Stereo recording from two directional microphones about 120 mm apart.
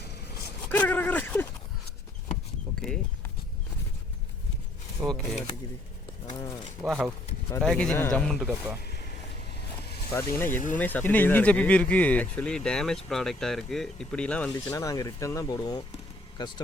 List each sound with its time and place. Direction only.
0.7 s a sound: 15° left (ahead or behind)
5.0 s speech: 5° left (ahead or behind)
6.2 s speech: 35° left (ahead or behind)
6.8 s speech: 25° right (ahead or behind)
7.6 s speech: 5° left (ahead or behind)
7.9 s speech: 20° left (ahead or behind)
8.2 s speech: 5° left (ahead or behind)
10.2 s speech: 20° left (ahead or behind)
14.8 s speech: 30° left (ahead or behind)